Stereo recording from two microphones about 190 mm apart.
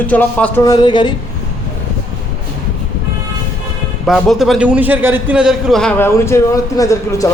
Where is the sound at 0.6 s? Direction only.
20° left (ahead or behind).